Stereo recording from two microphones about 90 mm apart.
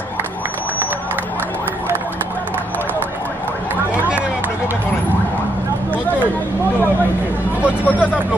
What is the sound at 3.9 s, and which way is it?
Run, 15° right (ahead or behind).